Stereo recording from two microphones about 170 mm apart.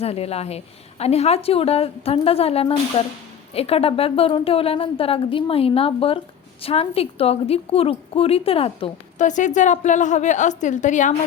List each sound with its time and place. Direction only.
0.0 s a woman's voice: 35° left (ahead or behind)